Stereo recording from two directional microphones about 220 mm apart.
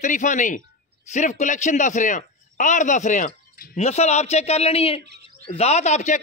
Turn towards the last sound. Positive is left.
turn(degrees=30)  # may be behind; listen again after turning